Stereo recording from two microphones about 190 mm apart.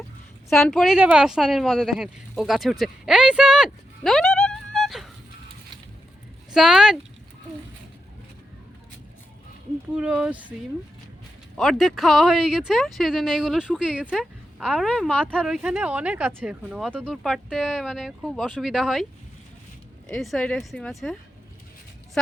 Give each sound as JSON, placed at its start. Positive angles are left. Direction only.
{"t": 0.5, "sound": "speech", "side_deg": 0}
{"t": 6.5, "sound": "speech", "side_deg": 0}
{"t": 9.9, "sound": "speech", "side_deg": -5}
{"t": 11.5, "sound": "speech", "side_deg": 0}
{"t": 20.1, "sound": "speech", "side_deg": 0}